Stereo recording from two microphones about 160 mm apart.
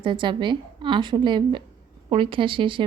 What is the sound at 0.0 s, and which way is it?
A woman's voice, 30° right (ahead or behind).